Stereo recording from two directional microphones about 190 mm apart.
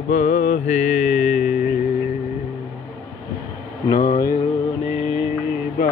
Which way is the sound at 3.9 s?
50° left (ahead or behind).